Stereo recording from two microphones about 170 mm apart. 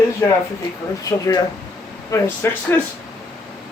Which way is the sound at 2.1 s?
15° left (ahead or behind).